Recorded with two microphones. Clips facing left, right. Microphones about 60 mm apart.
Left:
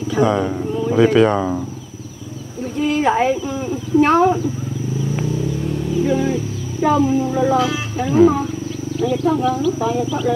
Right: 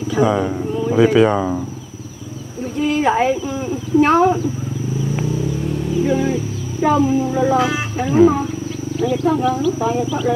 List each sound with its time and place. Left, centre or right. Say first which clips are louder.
0.1 s speech: even; centre
2.8 s speech: even; centre
6.0 s speech: even; centre
7.5 s speech: right 1 dB; right
8.1 s speech: even; centre